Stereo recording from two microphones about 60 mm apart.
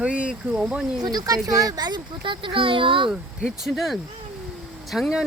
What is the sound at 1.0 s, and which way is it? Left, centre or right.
Speech, right.